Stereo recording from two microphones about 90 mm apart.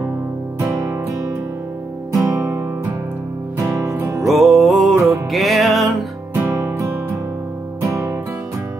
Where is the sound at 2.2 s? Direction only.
35° right (ahead or behind).